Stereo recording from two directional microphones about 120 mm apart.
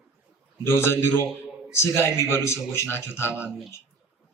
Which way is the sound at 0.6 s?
20° left (ahead or behind).